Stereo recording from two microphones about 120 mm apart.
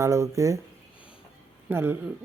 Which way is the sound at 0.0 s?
25° right (ahead or behind).